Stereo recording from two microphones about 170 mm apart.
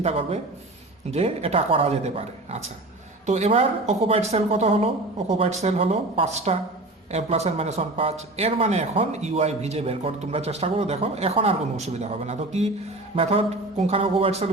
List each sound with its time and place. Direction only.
0.0 s a man's voice: 35° right (ahead or behind)